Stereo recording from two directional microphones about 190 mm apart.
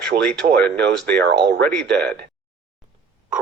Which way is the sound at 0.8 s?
60° right (ahead or behind).